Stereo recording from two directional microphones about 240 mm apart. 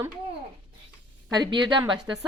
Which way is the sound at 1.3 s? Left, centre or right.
Centre.